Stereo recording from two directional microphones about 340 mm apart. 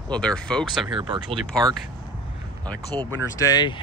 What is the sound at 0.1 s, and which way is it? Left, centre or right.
Speech, centre.